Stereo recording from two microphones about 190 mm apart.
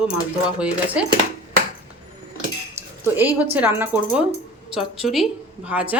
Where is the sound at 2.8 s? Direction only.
15° right (ahead or behind).